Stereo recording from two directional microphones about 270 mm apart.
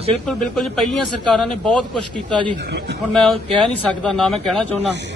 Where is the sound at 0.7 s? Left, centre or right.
Centre.